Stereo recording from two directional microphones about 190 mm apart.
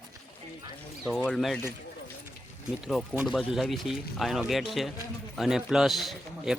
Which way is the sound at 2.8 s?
Centre (ahead or behind).